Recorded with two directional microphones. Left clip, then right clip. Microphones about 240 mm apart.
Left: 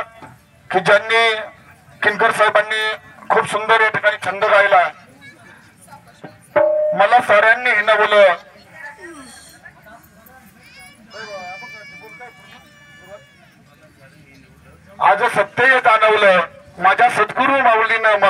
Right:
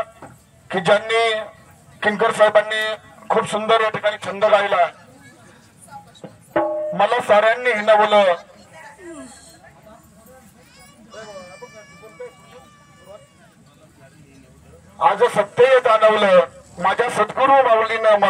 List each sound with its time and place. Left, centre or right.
0.7 s a man's voice: right
6.5 s speech: right
11.1 s sheep: right
15.0 s a man's voice: right